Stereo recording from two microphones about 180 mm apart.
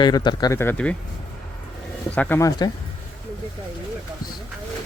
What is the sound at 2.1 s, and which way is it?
Speech, 10° left (ahead or behind).